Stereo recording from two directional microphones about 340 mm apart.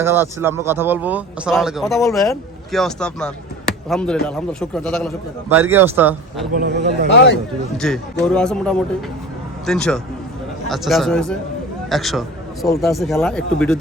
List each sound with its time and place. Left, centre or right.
0.0 s a man's voice: centre
6.5 s speech: right
7.8 s a man's voice: centre